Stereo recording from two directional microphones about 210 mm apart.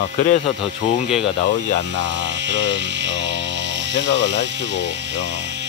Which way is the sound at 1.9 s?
55° right (ahead or behind).